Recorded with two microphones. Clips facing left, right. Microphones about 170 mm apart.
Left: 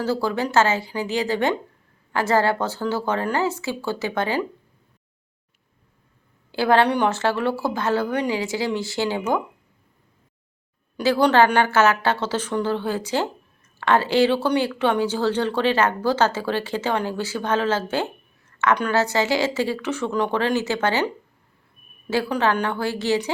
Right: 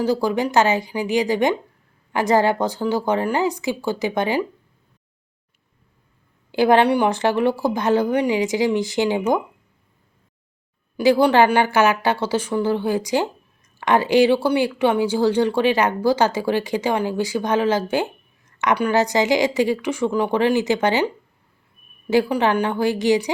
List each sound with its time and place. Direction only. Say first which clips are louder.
0.0 s a woman's voice: right 3 dB; 15° right (ahead or behind)
6.5 s a woman's voice: right 3 dB; 15° right (ahead or behind)
10.9 s a woman's voice: right 2 dB; 10° right (ahead or behind)
22.1 s a woman's voice: right 4 dB; 15° right (ahead or behind)